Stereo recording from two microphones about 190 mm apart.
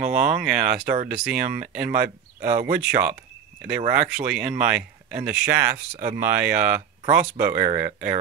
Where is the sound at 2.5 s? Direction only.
45° right (ahead or behind).